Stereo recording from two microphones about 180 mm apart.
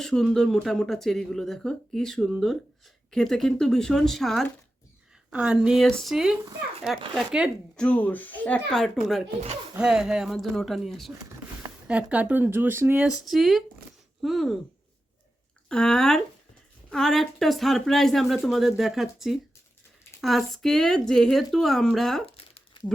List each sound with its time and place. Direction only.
0.0 s speech: 5° left (ahead or behind)
7.8 s speech: 10° left (ahead or behind)
15.7 s speech: 5° left (ahead or behind)
22.4 s crumpling: 35° left (ahead or behind)